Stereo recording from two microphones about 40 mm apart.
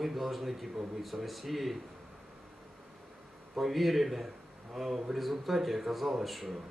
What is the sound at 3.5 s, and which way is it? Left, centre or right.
Speech, centre.